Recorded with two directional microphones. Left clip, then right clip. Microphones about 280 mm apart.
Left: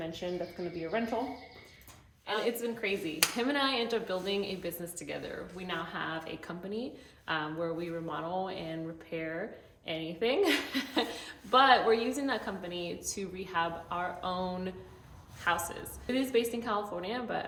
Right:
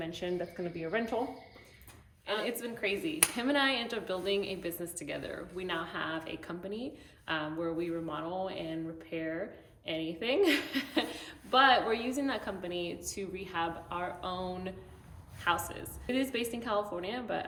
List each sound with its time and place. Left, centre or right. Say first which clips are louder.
0.0 s speech: even; centre
2.2 s a woman's voice: left 2 dB; centre